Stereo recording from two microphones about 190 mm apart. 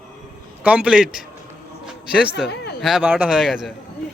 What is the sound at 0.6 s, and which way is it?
Speech, 5° right (ahead or behind).